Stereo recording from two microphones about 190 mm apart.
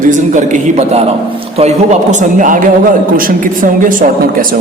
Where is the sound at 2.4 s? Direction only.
45° right (ahead or behind).